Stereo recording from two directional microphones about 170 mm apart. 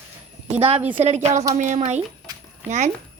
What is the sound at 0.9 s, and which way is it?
A woman's voice, 40° right (ahead or behind).